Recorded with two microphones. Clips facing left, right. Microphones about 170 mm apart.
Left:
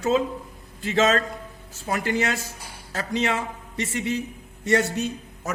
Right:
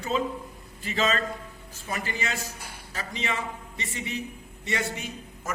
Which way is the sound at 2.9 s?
80° left.